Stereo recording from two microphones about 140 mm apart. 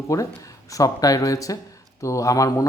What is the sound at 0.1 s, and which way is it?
A man's voice, 25° left (ahead or behind).